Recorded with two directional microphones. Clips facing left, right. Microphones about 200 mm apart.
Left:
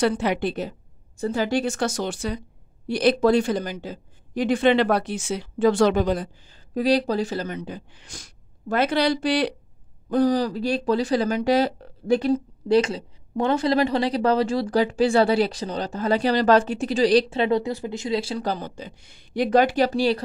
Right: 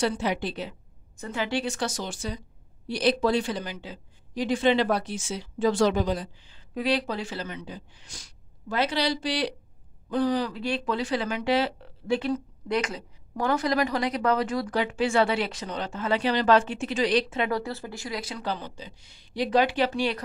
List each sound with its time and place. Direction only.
0.0 s a woman's voice: 60° left (ahead or behind)
1.1 s speech: 35° left (ahead or behind); by 2.4 s 60° left (ahead or behind)
2.9 s speech: 50° left (ahead or behind)
10.0 s speech: 40° left (ahead or behind)
18.4 s speech: 45° left (ahead or behind)